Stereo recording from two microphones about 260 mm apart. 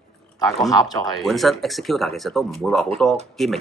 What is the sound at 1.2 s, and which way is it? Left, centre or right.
Speech, centre.